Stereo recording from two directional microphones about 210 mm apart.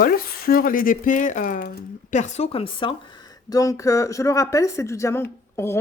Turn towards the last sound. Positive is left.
turn(degrees=10)  # may be behind; listen again after turning